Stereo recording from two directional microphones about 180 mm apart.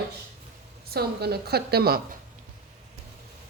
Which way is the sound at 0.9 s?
60° right (ahead or behind).